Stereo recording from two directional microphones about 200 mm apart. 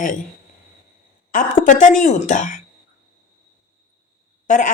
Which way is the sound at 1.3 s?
40° left (ahead or behind).